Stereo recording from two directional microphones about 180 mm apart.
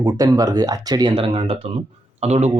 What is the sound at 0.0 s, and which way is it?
Speech, 20° right (ahead or behind).